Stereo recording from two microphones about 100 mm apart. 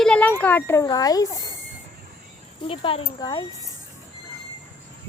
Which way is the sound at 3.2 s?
40° left (ahead or behind).